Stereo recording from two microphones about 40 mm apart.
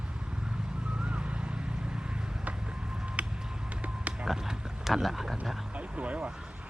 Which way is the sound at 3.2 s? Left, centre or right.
Right.